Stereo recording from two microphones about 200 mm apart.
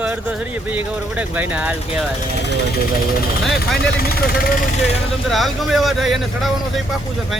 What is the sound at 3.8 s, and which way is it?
Speech, 50° left (ahead or behind).